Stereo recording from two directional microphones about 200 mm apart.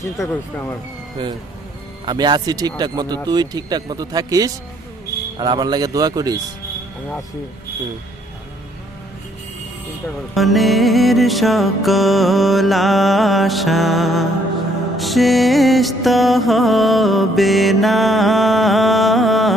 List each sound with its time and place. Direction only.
0.2 s speech: 15° left (ahead or behind)
2.0 s speech: 20° right (ahead or behind)
10.3 s music: centre (ahead or behind)